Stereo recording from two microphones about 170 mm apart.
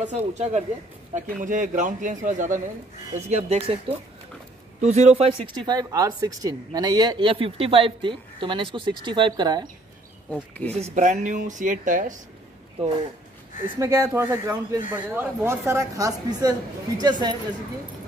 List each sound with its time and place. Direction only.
0.0 s speech: 45° right (ahead or behind)
4.8 s speech: 40° right (ahead or behind); by 9.7 s 25° right (ahead or behind)
10.3 s speech: 5° left (ahead or behind)
10.8 s speech: 45° right (ahead or behind)
13.7 s speech: 20° right (ahead or behind)